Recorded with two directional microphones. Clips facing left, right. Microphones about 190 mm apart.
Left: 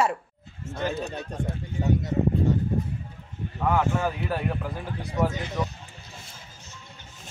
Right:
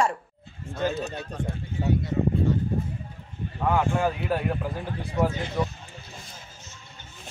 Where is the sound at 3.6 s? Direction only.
10° right (ahead or behind).